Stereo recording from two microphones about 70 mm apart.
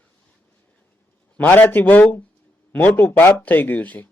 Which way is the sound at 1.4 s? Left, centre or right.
Left.